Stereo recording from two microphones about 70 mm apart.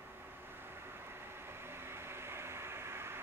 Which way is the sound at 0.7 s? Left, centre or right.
Right.